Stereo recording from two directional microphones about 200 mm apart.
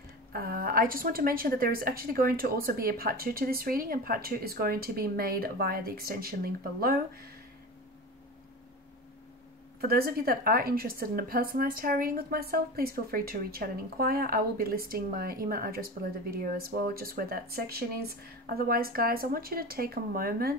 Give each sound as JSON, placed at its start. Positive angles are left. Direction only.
{"t": 0.3, "sound": "a woman's voice", "side_deg": -50}
{"t": 9.8, "sound": "a woman's voice", "side_deg": -50}